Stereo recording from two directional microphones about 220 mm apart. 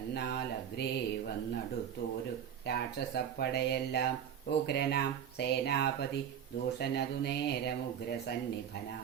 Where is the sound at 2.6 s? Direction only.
50° left (ahead or behind).